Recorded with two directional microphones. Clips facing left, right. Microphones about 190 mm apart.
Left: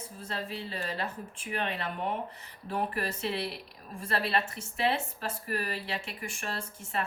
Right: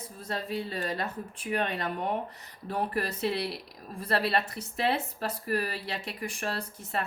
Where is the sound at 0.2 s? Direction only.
40° right (ahead or behind).